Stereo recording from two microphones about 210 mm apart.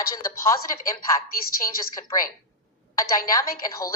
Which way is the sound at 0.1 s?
15° left (ahead or behind).